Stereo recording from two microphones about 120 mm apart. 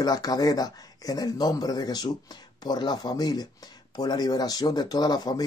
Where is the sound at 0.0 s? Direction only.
30° left (ahead or behind).